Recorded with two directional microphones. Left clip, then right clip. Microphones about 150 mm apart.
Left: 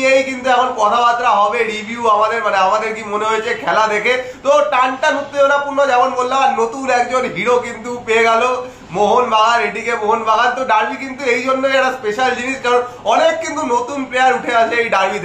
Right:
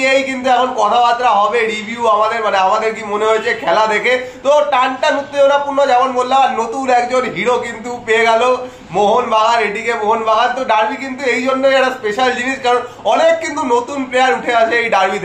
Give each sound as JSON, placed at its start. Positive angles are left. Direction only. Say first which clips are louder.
{"t": 0.0, "sound": "a man's voice", "louder": "even", "side_deg": -25}